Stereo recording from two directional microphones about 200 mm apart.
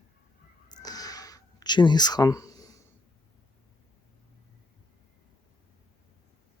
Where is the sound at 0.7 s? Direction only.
20° left (ahead or behind).